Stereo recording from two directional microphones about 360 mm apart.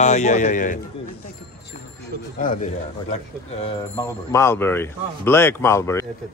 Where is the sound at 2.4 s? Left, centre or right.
Centre.